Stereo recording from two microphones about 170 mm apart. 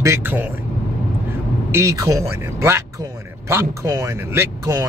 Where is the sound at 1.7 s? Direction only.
20° right (ahead or behind).